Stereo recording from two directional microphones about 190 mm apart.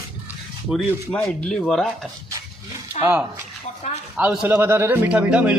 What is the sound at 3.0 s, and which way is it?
Speech, 10° right (ahead or behind).